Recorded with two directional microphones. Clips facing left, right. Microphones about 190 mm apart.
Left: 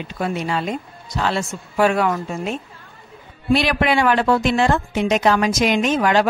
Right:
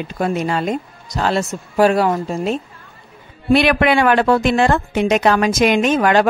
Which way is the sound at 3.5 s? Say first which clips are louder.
Right 4 dB; 60° right (ahead or behind).